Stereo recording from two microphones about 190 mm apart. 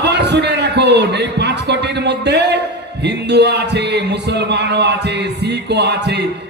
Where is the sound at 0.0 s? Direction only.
65° right (ahead or behind).